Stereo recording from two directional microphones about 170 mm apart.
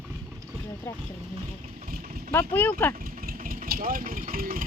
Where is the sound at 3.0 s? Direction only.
55° right (ahead or behind).